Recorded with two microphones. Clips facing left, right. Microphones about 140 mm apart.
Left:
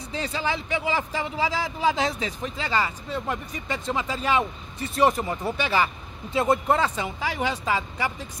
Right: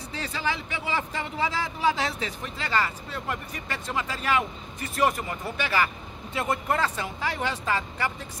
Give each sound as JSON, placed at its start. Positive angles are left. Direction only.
{"t": 0.1, "sound": "speech", "side_deg": 15}